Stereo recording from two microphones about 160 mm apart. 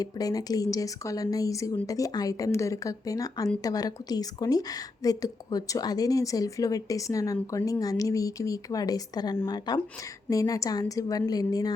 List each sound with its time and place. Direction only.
0.0 s a woman's voice: 25° left (ahead or behind)